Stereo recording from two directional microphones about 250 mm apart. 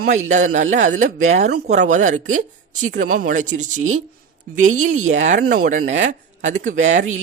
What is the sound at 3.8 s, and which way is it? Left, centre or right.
Speech, right.